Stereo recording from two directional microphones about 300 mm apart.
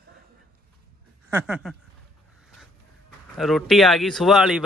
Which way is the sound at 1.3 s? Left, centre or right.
Centre.